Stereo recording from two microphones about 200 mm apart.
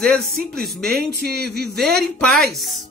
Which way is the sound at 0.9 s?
55° right (ahead or behind).